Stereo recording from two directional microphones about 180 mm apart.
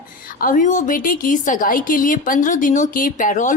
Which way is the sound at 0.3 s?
50° left (ahead or behind).